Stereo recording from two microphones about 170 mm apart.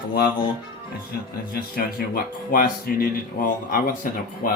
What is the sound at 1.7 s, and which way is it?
Speech, 55° left (ahead or behind).